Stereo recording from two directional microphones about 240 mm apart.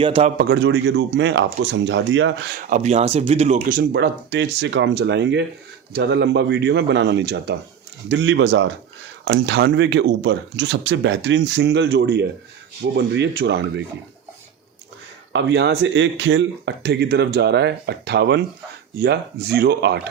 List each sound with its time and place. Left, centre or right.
0.0 s a man's voice: right
0.3 s speech: right
2.6 s speech: right
15.3 s speech: right